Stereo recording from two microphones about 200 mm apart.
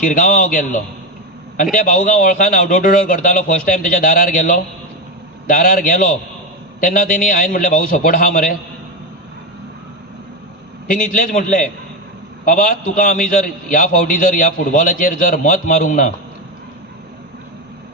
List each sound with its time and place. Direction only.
0.0 s a man's voice: 45° left (ahead or behind)
10.9 s a man's voice: 45° left (ahead or behind)
12.4 s a man's voice: 45° left (ahead or behind)